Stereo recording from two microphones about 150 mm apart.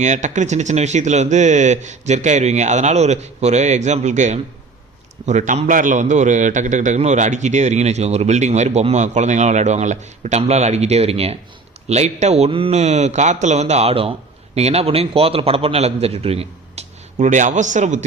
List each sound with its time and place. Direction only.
0.0 s a man's voice: 55° right (ahead or behind)